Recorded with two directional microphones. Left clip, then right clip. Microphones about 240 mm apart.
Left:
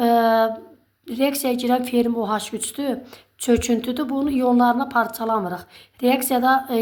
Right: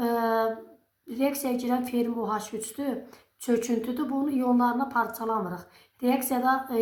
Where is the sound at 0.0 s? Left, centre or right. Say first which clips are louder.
Left 9 dB; left.